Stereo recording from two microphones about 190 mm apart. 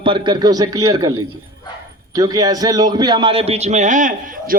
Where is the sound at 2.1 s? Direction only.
20° right (ahead or behind).